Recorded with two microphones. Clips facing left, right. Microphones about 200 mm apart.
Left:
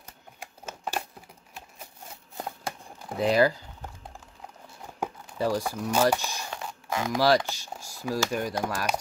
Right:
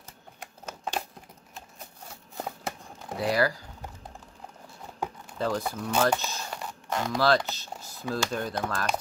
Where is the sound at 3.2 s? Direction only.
20° left (ahead or behind).